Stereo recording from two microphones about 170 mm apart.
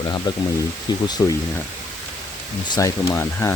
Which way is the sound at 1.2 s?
20° left (ahead or behind).